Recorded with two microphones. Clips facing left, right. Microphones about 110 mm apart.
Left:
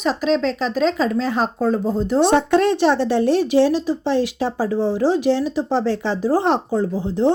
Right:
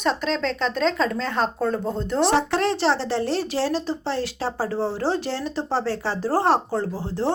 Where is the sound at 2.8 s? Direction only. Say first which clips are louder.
Left 5 dB; 15° left (ahead or behind).